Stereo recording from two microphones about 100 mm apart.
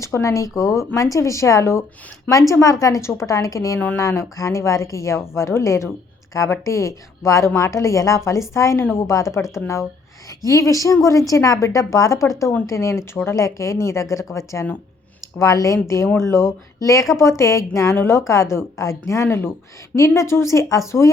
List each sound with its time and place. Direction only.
0.0 s a woman's voice: 30° left (ahead or behind)